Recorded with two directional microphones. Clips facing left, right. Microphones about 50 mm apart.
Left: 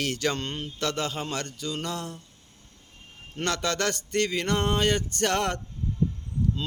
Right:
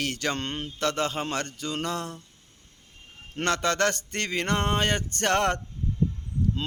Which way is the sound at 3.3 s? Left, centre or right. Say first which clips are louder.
Right 3 dB; right.